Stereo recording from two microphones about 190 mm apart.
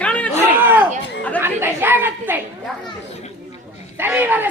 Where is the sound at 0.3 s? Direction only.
10° right (ahead or behind).